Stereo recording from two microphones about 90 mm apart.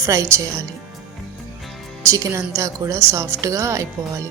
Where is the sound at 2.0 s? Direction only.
35° right (ahead or behind).